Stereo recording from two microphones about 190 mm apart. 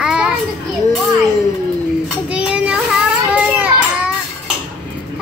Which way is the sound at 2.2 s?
5° right (ahead or behind).